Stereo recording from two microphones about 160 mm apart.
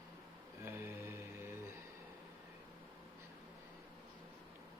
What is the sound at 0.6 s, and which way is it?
Mantra, 15° right (ahead or behind).